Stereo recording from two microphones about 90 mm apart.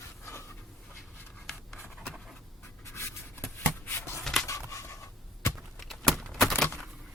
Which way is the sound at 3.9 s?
30° left (ahead or behind).